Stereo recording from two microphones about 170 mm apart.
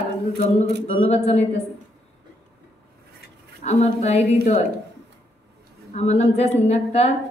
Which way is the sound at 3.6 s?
40° left (ahead or behind).